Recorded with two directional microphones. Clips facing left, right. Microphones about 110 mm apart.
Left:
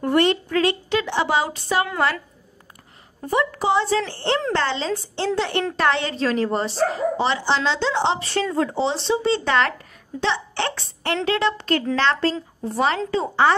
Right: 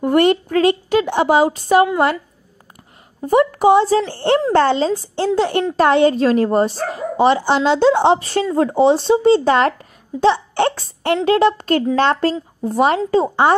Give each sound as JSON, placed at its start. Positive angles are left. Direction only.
{"t": 0.1, "sound": "a woman's voice", "side_deg": -45}
{"t": 3.3, "sound": "a woman's voice", "side_deg": -45}
{"t": 8.4, "sound": "speech", "side_deg": -35}
{"t": 8.7, "sound": "a woman's voice", "side_deg": -45}